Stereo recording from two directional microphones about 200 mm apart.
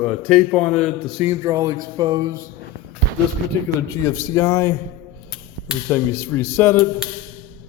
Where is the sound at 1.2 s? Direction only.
15° right (ahead or behind).